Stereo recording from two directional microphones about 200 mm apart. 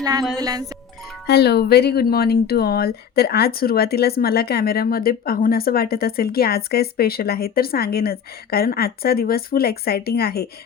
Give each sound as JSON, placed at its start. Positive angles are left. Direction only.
{"t": 0.0, "sound": "speech", "side_deg": -20}
{"t": 1.3, "sound": "speech", "side_deg": 55}